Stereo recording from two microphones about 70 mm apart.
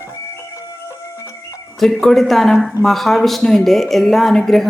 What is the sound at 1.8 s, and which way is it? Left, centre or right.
Speech, centre.